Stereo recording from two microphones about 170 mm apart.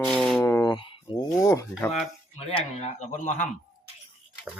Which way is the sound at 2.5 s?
45° left (ahead or behind).